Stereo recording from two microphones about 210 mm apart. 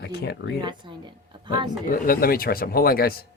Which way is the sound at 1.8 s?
45° left (ahead or behind).